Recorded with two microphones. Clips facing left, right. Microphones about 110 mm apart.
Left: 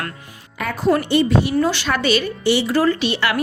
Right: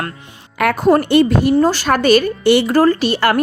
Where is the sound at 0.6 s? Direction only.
65° right (ahead or behind).